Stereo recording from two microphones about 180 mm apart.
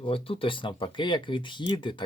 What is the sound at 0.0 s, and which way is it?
Speech, 30° left (ahead or behind).